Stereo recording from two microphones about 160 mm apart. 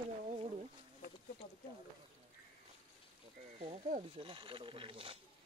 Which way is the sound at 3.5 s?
40° right (ahead or behind).